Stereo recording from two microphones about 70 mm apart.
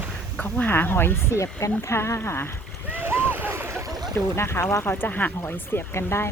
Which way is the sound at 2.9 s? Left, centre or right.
Right.